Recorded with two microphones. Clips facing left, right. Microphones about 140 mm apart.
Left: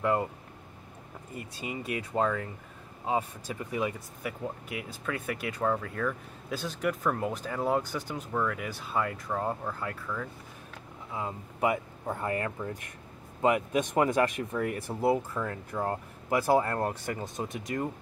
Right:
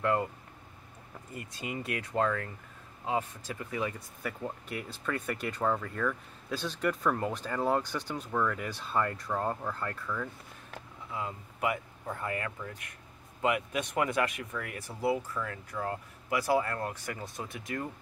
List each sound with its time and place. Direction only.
0.0 s speech: 15° left (ahead or behind)
1.7 s speech: 15° left (ahead or behind)
11.1 s speech: 30° left (ahead or behind)